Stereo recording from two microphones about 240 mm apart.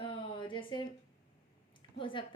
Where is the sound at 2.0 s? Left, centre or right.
Left.